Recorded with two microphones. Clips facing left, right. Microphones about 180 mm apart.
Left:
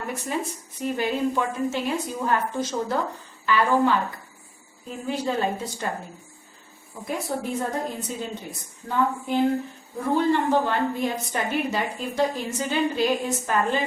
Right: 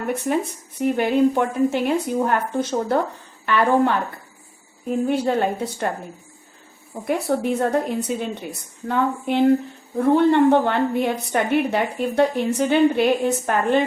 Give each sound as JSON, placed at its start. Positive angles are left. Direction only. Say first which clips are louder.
{"t": 0.8, "sound": "a woman's voice", "louder": "right 7 dB", "side_deg": -60}
{"t": 7.1, "sound": "a woman's voice", "louder": "right 7 dB", "side_deg": -70}